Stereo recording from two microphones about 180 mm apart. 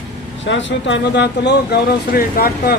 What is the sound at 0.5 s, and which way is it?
Speech, 85° left.